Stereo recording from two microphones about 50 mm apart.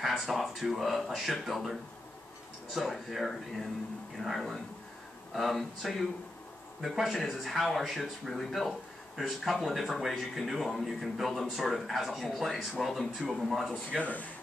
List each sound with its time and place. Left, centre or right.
0.3 s speech: centre
14.0 s speech: left